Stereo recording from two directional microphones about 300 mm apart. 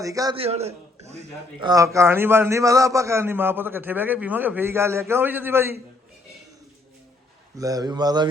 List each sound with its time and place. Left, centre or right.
0.0 s a man's voice: centre
1.7 s a man's voice: centre
7.6 s a man's voice: centre